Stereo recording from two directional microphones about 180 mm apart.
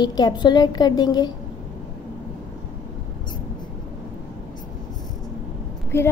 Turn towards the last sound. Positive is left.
turn(degrees=15)  # may be behind; listen again after turning